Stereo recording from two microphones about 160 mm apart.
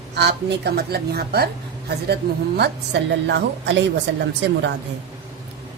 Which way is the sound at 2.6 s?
90° right.